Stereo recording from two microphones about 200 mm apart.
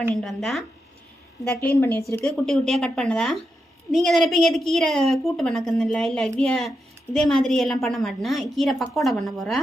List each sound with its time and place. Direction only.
0.2 s a woman's voice: centre (ahead or behind)
1.8 s a woman's voice: 15° left (ahead or behind)